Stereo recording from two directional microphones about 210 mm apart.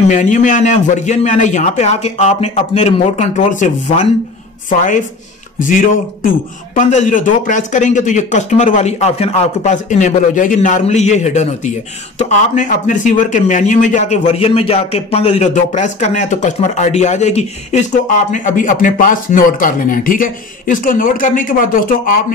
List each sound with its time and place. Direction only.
0.1 s a man's voice: 35° left (ahead or behind)
6.7 s a man's voice: 40° left (ahead or behind)